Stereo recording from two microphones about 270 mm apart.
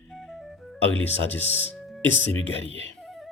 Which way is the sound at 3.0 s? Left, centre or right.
Centre.